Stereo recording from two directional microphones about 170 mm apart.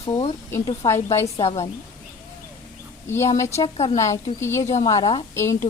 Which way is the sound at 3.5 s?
35° left (ahead or behind).